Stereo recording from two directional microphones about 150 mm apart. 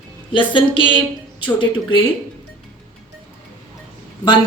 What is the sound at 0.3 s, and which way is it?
A woman's voice, 35° left (ahead or behind).